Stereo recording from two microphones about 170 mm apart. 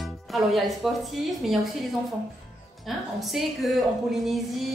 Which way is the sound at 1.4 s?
Centre (ahead or behind).